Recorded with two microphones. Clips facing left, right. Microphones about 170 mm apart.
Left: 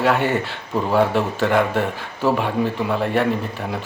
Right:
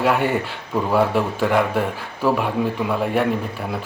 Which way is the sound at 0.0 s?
10° right (ahead or behind).